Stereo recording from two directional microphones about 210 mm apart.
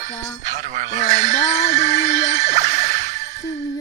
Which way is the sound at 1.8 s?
35° right (ahead or behind).